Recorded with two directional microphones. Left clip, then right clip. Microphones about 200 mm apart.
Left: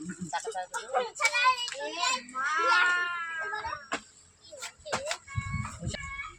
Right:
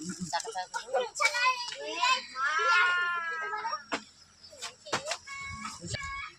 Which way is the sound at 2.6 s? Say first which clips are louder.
Left 1 dB; 60° left (ahead or behind).